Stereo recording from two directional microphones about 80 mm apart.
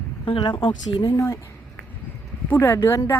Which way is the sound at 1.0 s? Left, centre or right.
Left.